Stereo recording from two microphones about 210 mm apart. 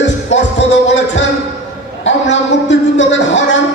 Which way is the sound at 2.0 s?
60° left (ahead or behind).